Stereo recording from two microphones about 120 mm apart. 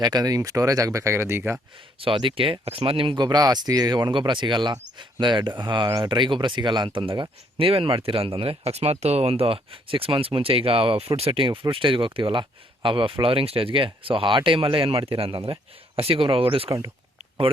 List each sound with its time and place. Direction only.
0.0 s speech: 35° right (ahead or behind)
2.0 s speech: 45° right (ahead or behind)